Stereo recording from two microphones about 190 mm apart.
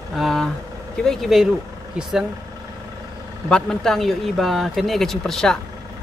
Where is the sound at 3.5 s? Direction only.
5° left (ahead or behind).